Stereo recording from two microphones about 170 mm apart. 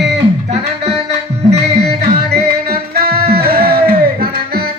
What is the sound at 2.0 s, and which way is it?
Music, 70° right (ahead or behind).